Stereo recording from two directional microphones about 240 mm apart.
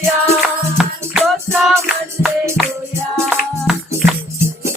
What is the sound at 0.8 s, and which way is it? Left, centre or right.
Music, centre.